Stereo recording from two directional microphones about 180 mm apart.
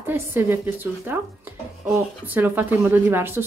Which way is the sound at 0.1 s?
10° right (ahead or behind).